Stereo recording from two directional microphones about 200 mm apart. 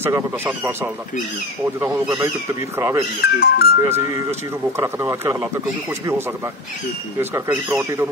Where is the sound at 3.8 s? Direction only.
15° right (ahead or behind).